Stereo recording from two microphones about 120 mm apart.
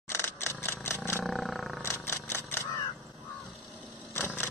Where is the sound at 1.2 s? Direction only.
Centre (ahead or behind).